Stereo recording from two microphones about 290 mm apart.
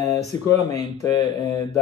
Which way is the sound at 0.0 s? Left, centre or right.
Centre.